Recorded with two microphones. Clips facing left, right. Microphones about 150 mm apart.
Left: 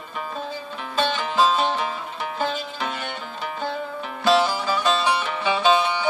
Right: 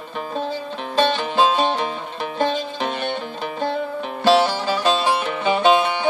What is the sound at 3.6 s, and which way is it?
Music, 65° right (ahead or behind).